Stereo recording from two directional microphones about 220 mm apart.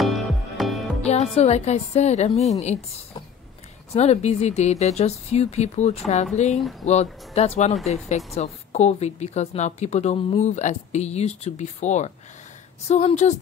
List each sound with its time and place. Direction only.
0.6 s music: centre (ahead or behind)
1.0 s a woman's voice: 30° left (ahead or behind)
3.9 s a woman's voice: 30° left (ahead or behind)